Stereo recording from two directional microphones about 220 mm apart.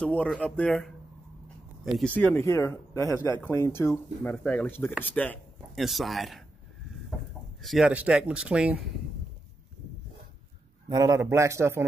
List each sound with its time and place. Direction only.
0.0 s speech: 5° left (ahead or behind)
7.6 s speech: centre (ahead or behind)
10.9 s a man's voice: 15° right (ahead or behind)